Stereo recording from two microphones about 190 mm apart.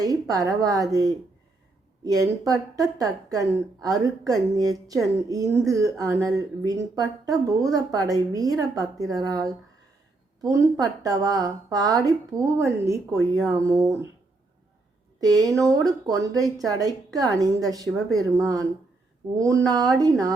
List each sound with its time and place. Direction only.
0.0 s a woman's voice: 20° right (ahead or behind)
15.2 s a woman's voice: 20° right (ahead or behind)